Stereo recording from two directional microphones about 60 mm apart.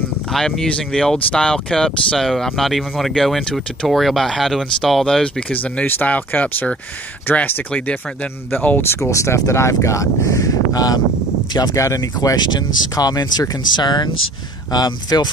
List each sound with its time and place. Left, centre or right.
0.3 s speech: centre
5.5 s speech: left
7.7 s speech: left
9.0 s speech: left
11.5 s speech: left
12.9 s speech: left
14.7 s speech: left